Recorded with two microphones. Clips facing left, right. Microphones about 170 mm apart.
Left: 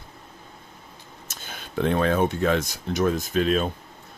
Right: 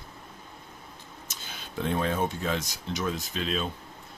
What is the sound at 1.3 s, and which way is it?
Speech, 60° left (ahead or behind).